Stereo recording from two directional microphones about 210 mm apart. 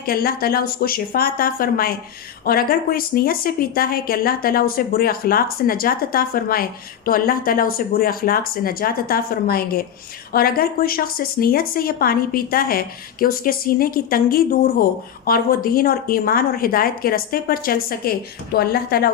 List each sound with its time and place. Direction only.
0.0 s speech: 45° left (ahead or behind)